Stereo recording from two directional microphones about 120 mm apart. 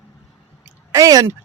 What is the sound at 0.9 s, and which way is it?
Speech, 30° right (ahead or behind).